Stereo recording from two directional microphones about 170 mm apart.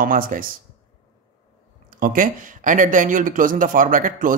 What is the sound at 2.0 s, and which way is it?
Speech, 50° right (ahead or behind).